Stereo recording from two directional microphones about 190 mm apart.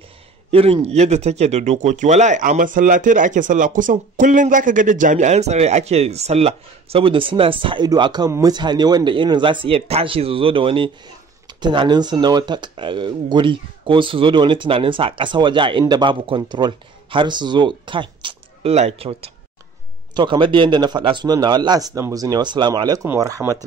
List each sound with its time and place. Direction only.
0.5 s speech: 30° right (ahead or behind)